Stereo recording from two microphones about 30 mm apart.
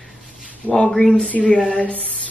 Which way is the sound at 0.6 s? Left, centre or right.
Left.